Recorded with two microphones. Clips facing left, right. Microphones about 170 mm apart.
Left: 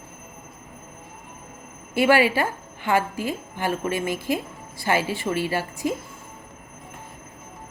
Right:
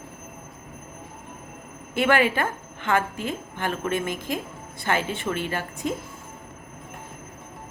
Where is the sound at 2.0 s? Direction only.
5° left (ahead or behind).